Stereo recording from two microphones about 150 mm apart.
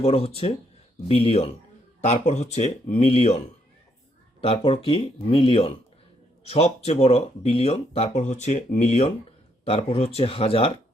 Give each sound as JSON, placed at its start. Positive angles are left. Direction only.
{"t": 0.0, "sound": "speech", "side_deg": 40}
{"t": 4.4, "sound": "speech", "side_deg": 35}